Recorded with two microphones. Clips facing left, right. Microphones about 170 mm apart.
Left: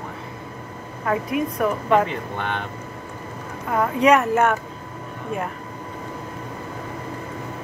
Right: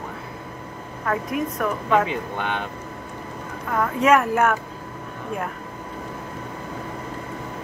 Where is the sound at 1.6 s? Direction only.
5° left (ahead or behind).